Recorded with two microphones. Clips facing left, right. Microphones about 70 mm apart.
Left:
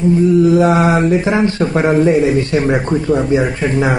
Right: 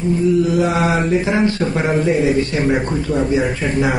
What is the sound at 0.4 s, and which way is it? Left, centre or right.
Mantra, left.